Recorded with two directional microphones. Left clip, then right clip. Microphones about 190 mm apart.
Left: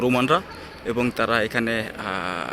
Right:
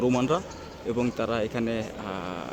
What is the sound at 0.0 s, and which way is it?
Speech, centre (ahead or behind).